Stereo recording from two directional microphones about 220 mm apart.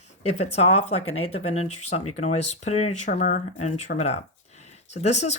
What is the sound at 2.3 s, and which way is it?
Speech, 90° left.